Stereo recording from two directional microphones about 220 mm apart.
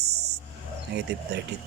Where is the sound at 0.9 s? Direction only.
50° right (ahead or behind).